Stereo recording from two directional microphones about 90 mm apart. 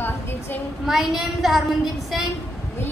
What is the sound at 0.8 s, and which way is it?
A woman's voice, 5° right (ahead or behind).